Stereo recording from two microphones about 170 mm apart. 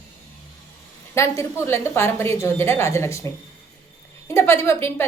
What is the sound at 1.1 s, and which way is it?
A woman's voice, 15° left (ahead or behind).